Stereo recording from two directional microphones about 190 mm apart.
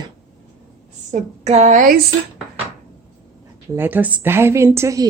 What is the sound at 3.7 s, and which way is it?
Speech, 10° right (ahead or behind).